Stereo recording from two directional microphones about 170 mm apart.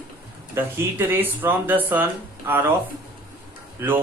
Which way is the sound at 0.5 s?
15° right (ahead or behind).